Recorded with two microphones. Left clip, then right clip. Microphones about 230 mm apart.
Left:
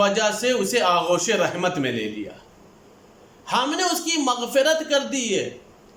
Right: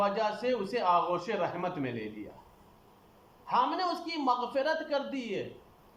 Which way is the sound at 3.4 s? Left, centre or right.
Left.